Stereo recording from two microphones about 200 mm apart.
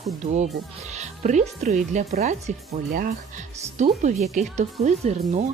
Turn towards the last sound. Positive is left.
turn(degrees=-35)  # may be behind; listen again after turning